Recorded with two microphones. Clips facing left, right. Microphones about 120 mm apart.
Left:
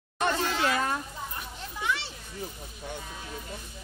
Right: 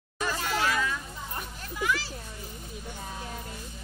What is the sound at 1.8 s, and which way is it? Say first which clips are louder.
Children playing: right 2 dB; 25° left (ahead or behind).